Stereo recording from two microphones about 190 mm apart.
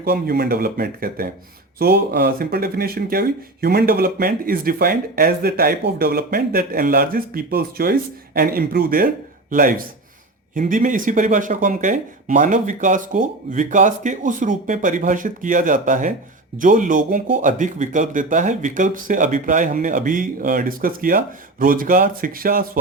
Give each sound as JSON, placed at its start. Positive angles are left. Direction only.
{"t": 0.0, "sound": "speech", "side_deg": -55}